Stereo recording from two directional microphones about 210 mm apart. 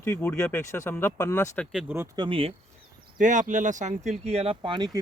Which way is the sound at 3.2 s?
35° right (ahead or behind).